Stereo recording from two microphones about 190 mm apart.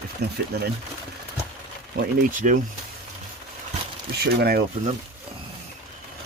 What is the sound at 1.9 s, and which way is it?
Speech, 45° right (ahead or behind).